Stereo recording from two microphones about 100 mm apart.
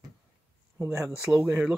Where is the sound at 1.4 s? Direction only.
20° right (ahead or behind).